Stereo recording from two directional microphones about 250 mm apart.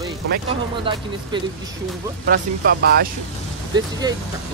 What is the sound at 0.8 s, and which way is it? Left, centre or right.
Speech, centre.